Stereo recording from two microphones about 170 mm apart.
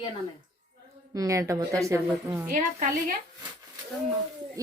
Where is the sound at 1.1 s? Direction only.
20° right (ahead or behind).